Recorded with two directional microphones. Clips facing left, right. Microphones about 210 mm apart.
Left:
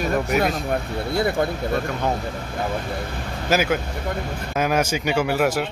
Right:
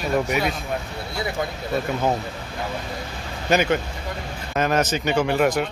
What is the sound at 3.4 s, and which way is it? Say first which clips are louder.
A man's voice: right 1 dB; 5° left (ahead or behind).